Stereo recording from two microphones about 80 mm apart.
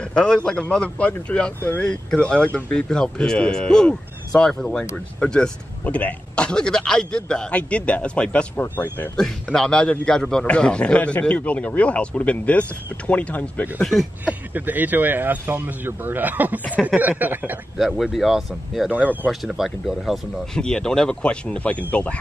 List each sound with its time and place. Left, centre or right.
0.0 s speech: centre
9.1 s speech: centre
14.2 s speech: right
17.7 s speech: centre
20.5 s speech: centre